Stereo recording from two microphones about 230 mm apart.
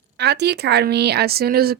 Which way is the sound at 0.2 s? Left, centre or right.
Right.